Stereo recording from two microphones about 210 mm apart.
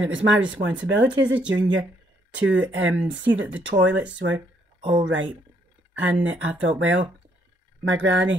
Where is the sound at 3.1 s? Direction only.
60° right (ahead or behind).